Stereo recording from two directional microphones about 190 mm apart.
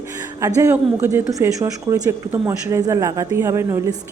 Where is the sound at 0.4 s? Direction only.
15° right (ahead or behind).